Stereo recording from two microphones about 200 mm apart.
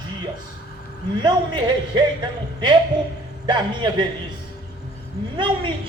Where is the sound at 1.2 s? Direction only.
20° right (ahead or behind).